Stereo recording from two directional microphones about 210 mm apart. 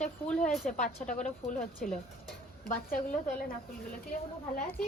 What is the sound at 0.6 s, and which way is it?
Speech, 35° left (ahead or behind).